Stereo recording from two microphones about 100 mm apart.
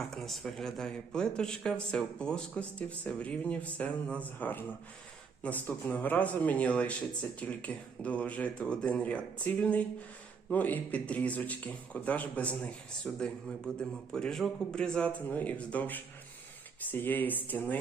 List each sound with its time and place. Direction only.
0.1 s speech: centre (ahead or behind); by 17.7 s 20° left (ahead or behind)